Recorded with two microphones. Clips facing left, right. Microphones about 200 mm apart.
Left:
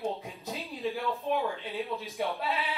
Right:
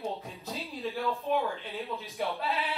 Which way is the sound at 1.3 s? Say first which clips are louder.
Left 1 dB; centre (ahead or behind).